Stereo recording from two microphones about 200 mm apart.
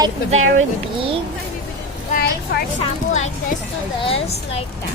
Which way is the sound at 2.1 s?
50° left (ahead or behind).